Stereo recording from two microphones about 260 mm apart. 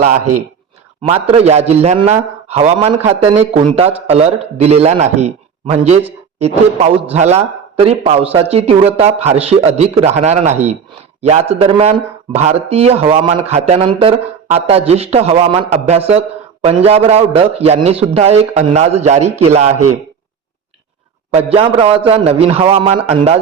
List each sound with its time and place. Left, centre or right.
1.0 s a man's voice: right
21.2 s a man's voice: right